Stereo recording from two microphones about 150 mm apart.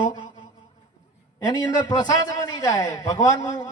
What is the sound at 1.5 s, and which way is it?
A man's voice, 25° left (ahead or behind).